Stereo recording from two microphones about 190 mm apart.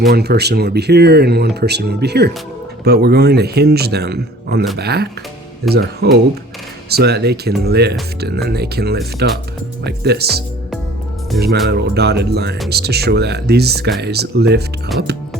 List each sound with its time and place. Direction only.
0.1 s speech: 60° right (ahead or behind)
11.3 s speech: centre (ahead or behind)
11.7 s speech: 60° right (ahead or behind)
14.9 s speech: centre (ahead or behind)